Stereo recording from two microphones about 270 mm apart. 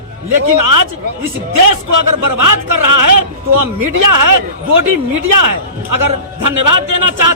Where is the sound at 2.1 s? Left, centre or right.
Right.